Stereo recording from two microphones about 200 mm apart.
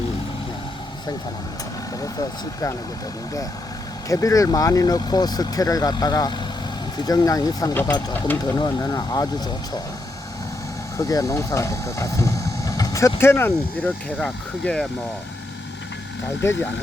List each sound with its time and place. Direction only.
4.1 s speech: 15° left (ahead or behind)
10.9 s speech: 15° left (ahead or behind)
16.4 s speech: 10° left (ahead or behind)